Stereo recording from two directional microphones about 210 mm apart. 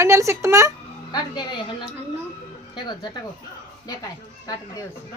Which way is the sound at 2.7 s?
20° left (ahead or behind).